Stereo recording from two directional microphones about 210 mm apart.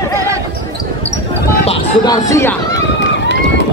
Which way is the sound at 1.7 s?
20° left (ahead or behind).